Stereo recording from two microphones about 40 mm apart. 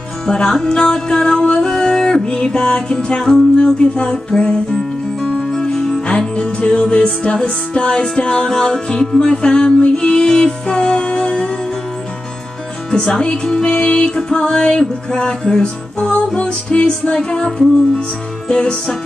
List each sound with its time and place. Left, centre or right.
0.3 s music: centre
6.0 s music: left
10.7 s music: left
12.9 s music: centre
18.5 s music: left